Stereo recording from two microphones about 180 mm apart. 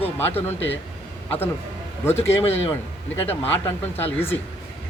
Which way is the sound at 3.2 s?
10° left (ahead or behind).